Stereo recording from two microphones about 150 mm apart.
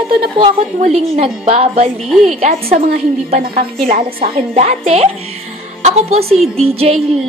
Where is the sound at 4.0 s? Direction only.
35° right (ahead or behind).